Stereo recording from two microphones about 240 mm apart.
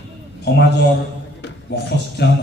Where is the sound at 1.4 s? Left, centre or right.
Left.